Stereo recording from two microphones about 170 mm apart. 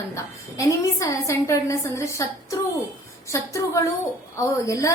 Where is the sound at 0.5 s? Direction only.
20° left (ahead or behind).